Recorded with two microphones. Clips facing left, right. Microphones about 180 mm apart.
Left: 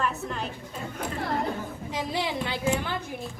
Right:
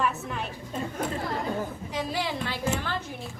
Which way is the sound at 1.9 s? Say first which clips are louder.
Left 3 dB; 20° left (ahead or behind).